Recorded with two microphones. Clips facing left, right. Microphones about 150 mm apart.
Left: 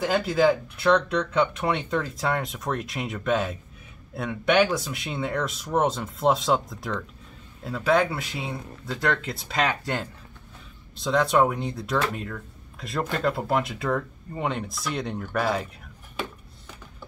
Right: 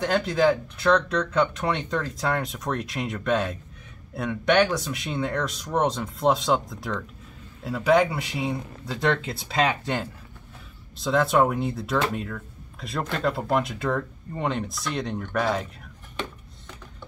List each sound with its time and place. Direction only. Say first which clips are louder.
0.0 s speech: even; 5° left (ahead or behind)
9.0 s speech: right 2 dB; 25° right (ahead or behind)
9.3 s speech: right 2 dB; centre (ahead or behind)
11.0 s speech: even; centre (ahead or behind)